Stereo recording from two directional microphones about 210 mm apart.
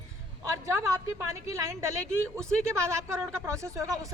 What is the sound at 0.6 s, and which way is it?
A woman's voice, 10° right (ahead or behind).